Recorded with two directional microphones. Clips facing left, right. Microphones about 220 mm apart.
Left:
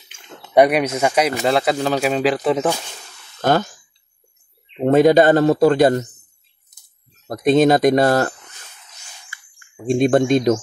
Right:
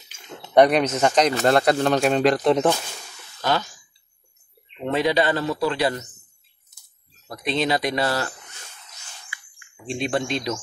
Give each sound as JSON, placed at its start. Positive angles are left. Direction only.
{"t": 0.6, "sound": "a man's voice", "side_deg": 10}
{"t": 3.3, "sound": "a sound", "side_deg": 50}
{"t": 4.7, "sound": "speech", "side_deg": 45}
{"t": 7.2, "sound": "speech", "side_deg": 45}